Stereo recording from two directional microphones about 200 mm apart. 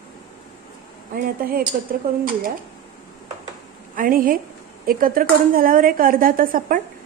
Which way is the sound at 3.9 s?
45° right (ahead or behind).